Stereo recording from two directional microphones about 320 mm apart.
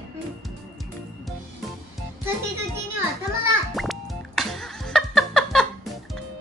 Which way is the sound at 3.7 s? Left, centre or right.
Centre.